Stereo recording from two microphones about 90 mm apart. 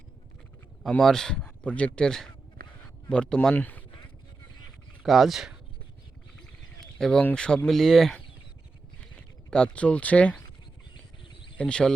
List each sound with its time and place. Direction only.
0.8 s speech: 5° left (ahead or behind)
2.8 s a sound: 10° left (ahead or behind)
3.5 s speech: 20° left (ahead or behind)
5.0 s speech: centre (ahead or behind)
6.4 s a sound: 5° left (ahead or behind)
7.3 s speech: 10° left (ahead or behind)
9.5 s speech: 10° left (ahead or behind)
11.5 s speech: 10° left (ahead or behind)